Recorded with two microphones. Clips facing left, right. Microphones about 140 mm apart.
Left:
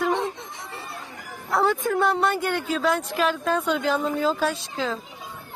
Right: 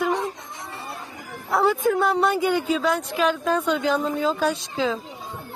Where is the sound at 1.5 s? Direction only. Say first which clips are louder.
Right 2 dB; centre (ahead or behind).